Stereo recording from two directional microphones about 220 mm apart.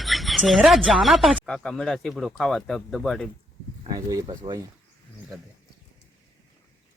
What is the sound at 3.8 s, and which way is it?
Speech, 15° right (ahead or behind).